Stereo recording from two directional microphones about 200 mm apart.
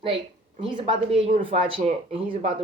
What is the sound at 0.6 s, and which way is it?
Speech, 25° right (ahead or behind).